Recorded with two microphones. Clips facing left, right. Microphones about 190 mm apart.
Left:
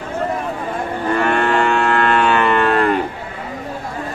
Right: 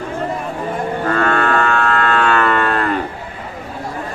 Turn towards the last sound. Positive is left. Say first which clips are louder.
# left 1 dB
turn(degrees=15)  # may be behind; listen again after turning